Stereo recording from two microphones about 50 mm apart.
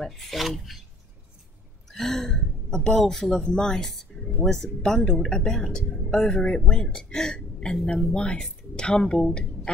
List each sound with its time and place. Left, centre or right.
0.0 s filing: centre
1.9 s a sound: centre
3.3 s speech: centre
6.3 s speech: left
7.8 s filing: centre
8.1 s speech: centre